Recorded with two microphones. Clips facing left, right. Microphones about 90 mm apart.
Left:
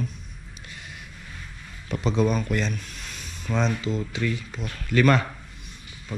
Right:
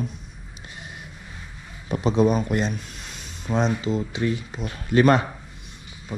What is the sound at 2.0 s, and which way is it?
Speech, 25° right (ahead or behind).